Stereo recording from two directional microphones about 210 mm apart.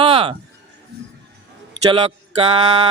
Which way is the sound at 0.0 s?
25° right (ahead or behind).